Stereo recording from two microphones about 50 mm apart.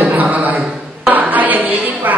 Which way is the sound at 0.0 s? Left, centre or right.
Right.